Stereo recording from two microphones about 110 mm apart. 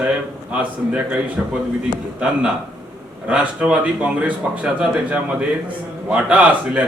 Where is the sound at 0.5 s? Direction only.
15° right (ahead or behind).